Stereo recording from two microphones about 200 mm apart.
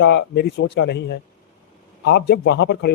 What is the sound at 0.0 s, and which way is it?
Speech, 60° left (ahead or behind).